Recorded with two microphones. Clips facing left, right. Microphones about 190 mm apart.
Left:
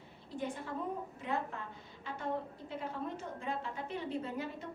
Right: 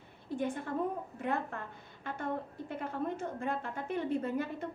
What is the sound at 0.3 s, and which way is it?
A woman's voice, 50° right (ahead or behind).